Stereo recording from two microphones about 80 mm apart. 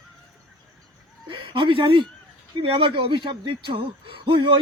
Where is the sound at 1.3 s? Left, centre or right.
Right.